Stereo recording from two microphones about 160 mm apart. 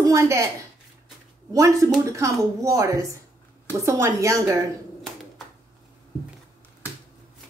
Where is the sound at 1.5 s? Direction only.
20° right (ahead or behind).